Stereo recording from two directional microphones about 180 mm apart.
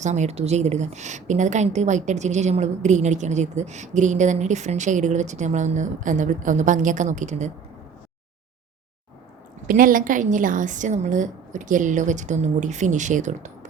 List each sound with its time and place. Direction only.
0.0 s a woman's voice: 40° right (ahead or behind)
9.6 s a woman's voice: 50° right (ahead or behind)